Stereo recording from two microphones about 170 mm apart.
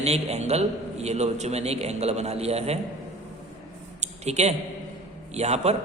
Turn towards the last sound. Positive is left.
turn(degrees=-40)  # may be behind; listen again after turning